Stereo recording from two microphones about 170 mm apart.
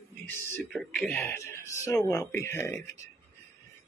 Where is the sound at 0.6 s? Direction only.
5° left (ahead or behind).